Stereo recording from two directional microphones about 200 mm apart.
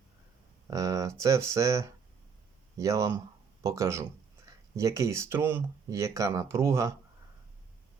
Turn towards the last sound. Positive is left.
turn(degrees=-15)  # may be behind; listen again after turning